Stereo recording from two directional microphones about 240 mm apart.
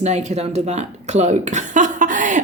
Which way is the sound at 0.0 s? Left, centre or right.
Right.